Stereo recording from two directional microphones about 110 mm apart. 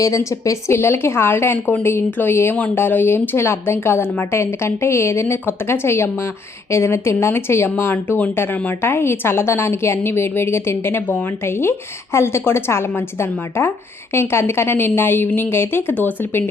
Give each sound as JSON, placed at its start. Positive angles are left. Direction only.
{"t": 0.0, "sound": "a woman's voice", "side_deg": 30}